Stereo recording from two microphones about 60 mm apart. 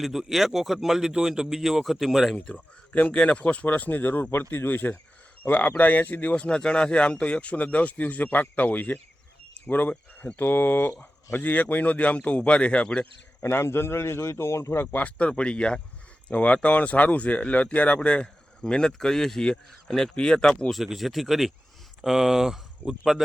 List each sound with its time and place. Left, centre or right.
0.0 s speech: centre
2.4 s speech: left
13.4 s a man's voice: left
14.8 s speech: left
20.7 s speech: centre